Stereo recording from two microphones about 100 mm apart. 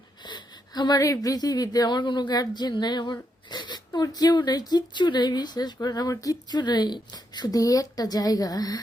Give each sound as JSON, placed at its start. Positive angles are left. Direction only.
{"t": 0.2, "sound": "speech", "side_deg": 45}